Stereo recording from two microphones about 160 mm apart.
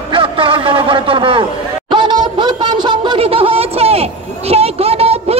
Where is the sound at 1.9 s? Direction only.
30° right (ahead or behind).